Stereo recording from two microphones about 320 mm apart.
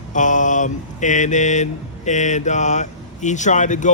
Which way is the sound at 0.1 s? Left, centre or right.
Left.